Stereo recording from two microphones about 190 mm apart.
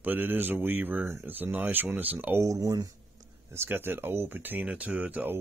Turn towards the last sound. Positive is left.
turn(degrees=-10)  # may be behind; listen again after turning